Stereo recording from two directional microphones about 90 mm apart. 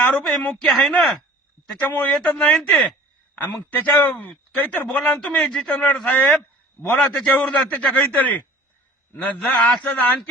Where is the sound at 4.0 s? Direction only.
15° left (ahead or behind).